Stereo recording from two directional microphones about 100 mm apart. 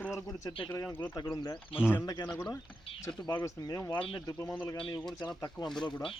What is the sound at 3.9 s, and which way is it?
Speech, 60° left (ahead or behind).